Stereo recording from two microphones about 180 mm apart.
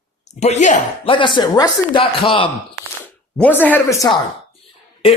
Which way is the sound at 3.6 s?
10° left (ahead or behind).